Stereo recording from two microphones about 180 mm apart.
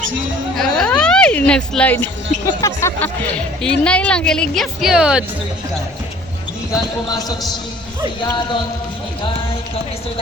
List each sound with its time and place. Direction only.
0.5 s a sound: 5° left (ahead or behind)
2.6 s a woman's voice: 15° left (ahead or behind); by 5.2 s 5° right (ahead or behind)
6.7 s speech: 20° left (ahead or behind)